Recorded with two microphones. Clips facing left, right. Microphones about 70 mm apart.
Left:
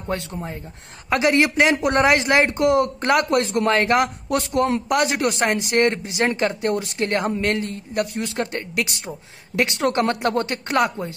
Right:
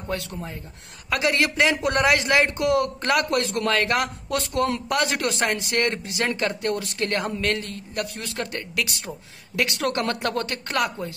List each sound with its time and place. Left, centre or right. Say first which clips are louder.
0.1 s a man's voice: left 3 dB; left